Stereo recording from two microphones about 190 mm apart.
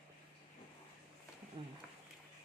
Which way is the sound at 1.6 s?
25° right (ahead or behind).